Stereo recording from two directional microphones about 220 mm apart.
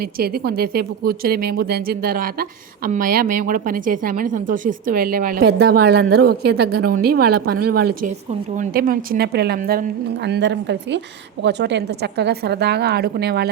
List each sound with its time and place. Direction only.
0.2 s a woman's voice: 45° right (ahead or behind)